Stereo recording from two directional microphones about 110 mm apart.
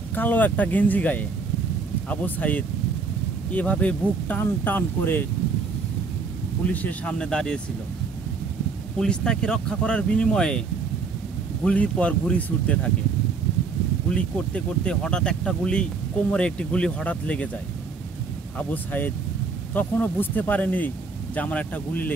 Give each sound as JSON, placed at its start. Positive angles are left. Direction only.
{"t": 0.1, "sound": "speech", "side_deg": 15}
{"t": 6.7, "sound": "speech", "side_deg": 15}
{"t": 9.0, "sound": "speech", "side_deg": 5}
{"t": 11.6, "sound": "speech", "side_deg": 10}
{"t": 14.1, "sound": "speech", "side_deg": 10}
{"t": 18.7, "sound": "speech", "side_deg": 15}